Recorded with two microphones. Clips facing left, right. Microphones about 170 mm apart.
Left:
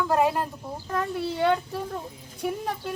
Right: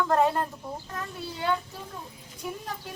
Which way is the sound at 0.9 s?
65° left (ahead or behind).